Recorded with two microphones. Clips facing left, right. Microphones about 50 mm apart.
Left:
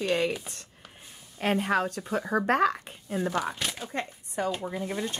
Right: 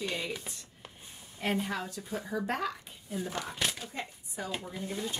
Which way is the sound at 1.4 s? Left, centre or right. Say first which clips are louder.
Left 7 dB; left.